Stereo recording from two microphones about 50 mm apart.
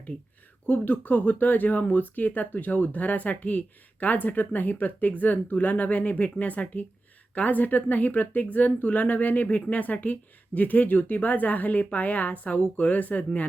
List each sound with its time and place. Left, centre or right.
0.7 s speech: left